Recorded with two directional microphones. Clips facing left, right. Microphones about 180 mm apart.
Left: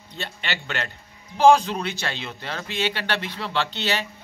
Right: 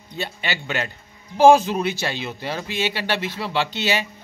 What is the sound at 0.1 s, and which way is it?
Speech, 10° right (ahead or behind).